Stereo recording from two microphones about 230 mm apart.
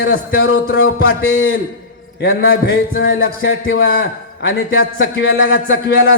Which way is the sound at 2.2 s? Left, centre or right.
Left.